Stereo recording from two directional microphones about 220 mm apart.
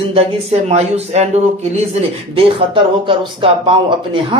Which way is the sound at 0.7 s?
30° right (ahead or behind).